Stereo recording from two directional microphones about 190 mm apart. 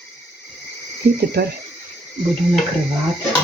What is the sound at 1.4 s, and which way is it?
Speech, 55° right (ahead or behind).